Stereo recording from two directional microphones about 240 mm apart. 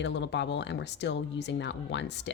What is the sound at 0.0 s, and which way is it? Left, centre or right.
Speech, left.